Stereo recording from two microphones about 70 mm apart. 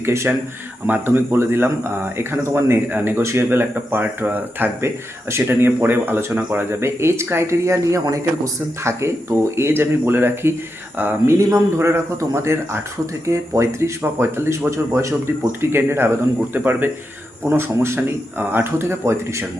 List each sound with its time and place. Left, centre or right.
0.0 s speech: right
0.9 s speech: right
11.3 s speech: right
14.7 s speech: right
15.7 s speech: right